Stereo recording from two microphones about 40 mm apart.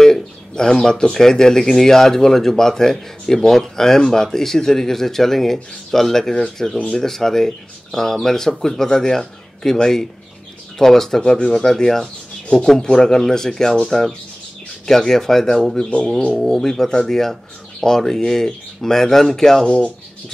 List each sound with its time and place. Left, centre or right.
0.0 s bird: centre
1.1 s speech: centre
19.6 s speech: left